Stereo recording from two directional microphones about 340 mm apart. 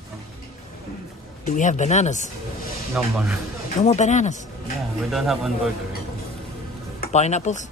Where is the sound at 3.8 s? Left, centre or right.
Left.